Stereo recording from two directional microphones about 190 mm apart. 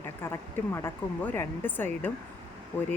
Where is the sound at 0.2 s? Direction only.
10° left (ahead or behind).